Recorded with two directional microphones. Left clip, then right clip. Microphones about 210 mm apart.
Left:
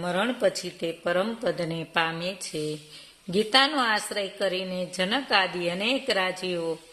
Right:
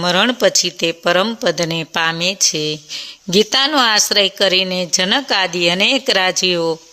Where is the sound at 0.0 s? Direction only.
40° right (ahead or behind).